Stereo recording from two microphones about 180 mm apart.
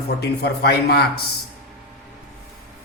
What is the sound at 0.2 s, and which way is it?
Speech, 65° left (ahead or behind).